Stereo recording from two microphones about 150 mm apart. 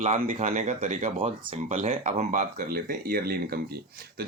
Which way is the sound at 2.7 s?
75° right (ahead or behind).